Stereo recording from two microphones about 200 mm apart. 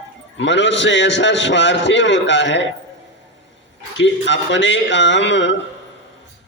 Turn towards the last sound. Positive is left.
turn(degrees=65)  # may be behind; listen again after turning